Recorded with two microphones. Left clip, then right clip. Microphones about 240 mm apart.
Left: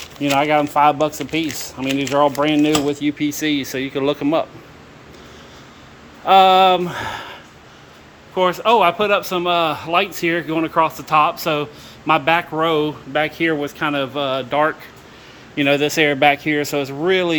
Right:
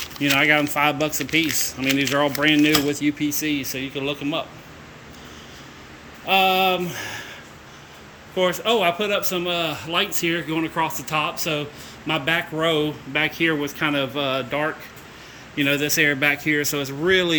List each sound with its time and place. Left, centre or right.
0.2 s a man's voice: centre
3.9 s speech: left
6.2 s speech: centre
8.4 s a man's voice: centre